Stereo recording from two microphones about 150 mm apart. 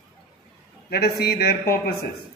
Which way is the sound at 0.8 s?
90° left.